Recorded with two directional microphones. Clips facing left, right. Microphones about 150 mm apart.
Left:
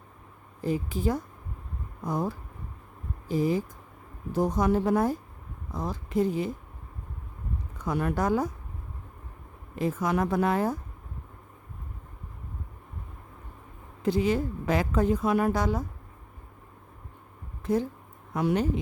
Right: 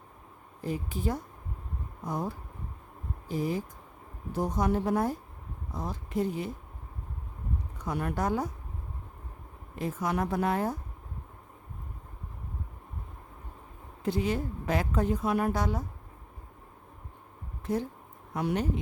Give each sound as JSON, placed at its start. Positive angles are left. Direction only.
{"t": 0.6, "sound": "a woman's voice", "side_deg": 90}
{"t": 7.9, "sound": "a woman's voice", "side_deg": 90}
{"t": 9.7, "sound": "a woman's voice", "side_deg": 90}
{"t": 14.0, "sound": "a woman's voice", "side_deg": 90}
{"t": 17.7, "sound": "a woman's voice", "side_deg": 90}